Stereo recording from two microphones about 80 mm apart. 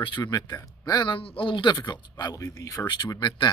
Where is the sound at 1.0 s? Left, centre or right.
Left.